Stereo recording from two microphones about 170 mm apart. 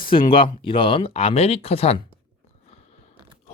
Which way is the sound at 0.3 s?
30° left (ahead or behind).